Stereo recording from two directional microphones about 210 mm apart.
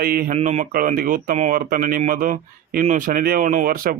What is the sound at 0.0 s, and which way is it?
Speech, 45° right (ahead or behind).